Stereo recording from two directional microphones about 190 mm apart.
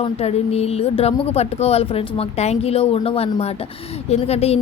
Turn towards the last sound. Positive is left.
turn(degrees=30)  # may be behind; listen again after turning